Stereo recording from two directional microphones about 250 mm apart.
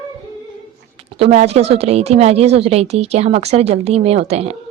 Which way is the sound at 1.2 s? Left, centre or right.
Right.